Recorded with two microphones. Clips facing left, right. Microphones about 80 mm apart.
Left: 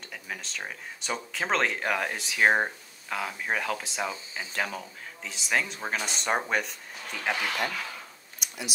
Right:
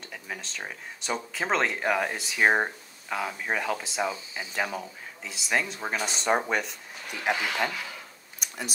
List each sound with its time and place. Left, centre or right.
0.1 s speech: centre
7.1 s speech: centre
8.4 s a sound: right